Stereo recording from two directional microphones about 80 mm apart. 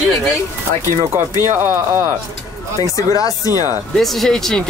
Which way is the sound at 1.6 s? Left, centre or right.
Right.